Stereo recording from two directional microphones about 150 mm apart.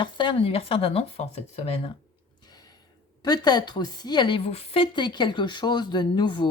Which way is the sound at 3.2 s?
25° left (ahead or behind).